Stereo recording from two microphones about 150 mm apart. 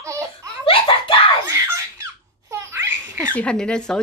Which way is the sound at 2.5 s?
20° right (ahead or behind).